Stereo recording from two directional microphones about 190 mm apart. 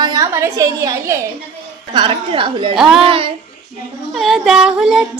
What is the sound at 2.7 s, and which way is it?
Female singing, centre (ahead or behind).